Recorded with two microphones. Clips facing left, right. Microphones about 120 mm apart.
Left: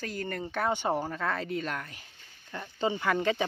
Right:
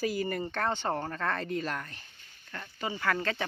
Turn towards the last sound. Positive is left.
turn(degrees=15)  # may be behind; listen again after turning